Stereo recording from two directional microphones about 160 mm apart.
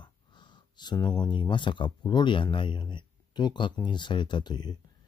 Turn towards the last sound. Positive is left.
turn(degrees=25)  # may be behind; listen again after turning